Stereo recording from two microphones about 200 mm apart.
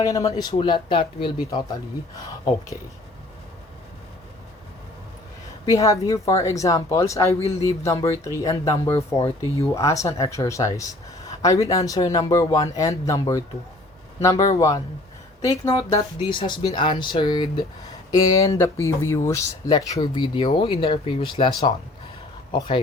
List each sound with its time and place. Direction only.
0.0 s speech: 15° left (ahead or behind)
5.6 s speech: 15° left (ahead or behind)
22.5 s speech: 25° left (ahead or behind)